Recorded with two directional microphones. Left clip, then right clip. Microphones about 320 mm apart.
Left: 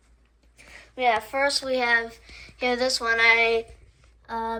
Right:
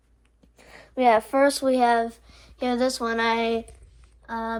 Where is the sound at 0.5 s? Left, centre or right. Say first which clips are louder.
Right 5 dB; centre.